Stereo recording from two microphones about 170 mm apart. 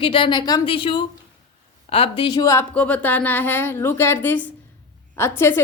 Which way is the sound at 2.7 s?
10° left (ahead or behind).